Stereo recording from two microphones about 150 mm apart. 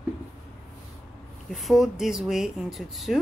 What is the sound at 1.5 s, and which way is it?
Speech, centre (ahead or behind).